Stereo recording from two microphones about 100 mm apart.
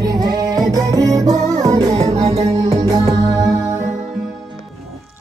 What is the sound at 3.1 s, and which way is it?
Music, 35° right (ahead or behind).